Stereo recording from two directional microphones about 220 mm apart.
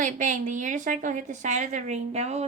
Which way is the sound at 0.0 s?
35° right (ahead or behind).